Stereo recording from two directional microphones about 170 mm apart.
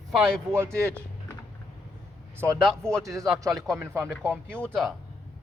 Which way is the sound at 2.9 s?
20° right (ahead or behind).